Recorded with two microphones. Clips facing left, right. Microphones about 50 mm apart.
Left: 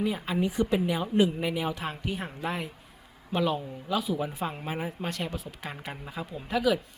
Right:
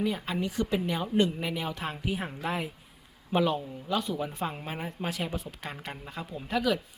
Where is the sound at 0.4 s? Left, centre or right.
Centre.